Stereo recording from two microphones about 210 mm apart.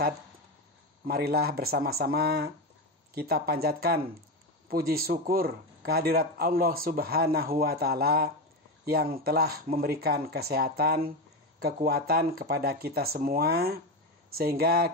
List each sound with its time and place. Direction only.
1.0 s speech: 45° right (ahead or behind)